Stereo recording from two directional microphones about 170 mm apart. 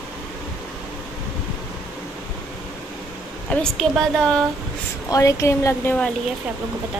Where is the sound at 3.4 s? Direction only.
5° left (ahead or behind).